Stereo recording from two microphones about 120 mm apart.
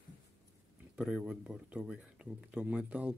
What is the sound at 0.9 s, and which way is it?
Speech, 5° right (ahead or behind).